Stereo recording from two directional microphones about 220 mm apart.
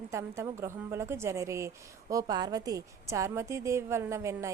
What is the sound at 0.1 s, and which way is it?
A woman's voice, 15° right (ahead or behind).